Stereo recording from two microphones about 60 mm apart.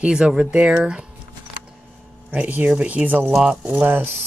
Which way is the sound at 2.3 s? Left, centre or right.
Right.